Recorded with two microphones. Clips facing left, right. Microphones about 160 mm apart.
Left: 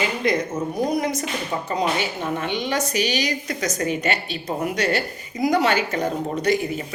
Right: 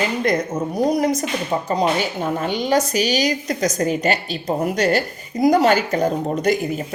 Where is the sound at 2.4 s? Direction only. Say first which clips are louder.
Right 7 dB; 40° right (ahead or behind).